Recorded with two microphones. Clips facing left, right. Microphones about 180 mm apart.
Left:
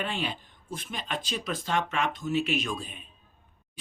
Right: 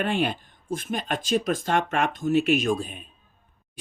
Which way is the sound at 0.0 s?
55° right (ahead or behind).